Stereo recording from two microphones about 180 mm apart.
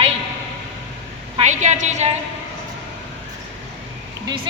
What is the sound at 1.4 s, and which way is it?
Speech, 40° right (ahead or behind).